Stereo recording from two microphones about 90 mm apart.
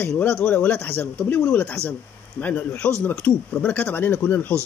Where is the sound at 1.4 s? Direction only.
10° left (ahead or behind).